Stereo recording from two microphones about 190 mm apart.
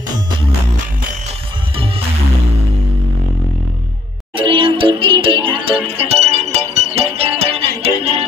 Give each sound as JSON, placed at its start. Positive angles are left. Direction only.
{"t": 4.4, "sound": "music", "side_deg": -25}